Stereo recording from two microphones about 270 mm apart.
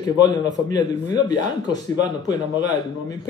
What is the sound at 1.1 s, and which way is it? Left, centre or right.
Speech, centre.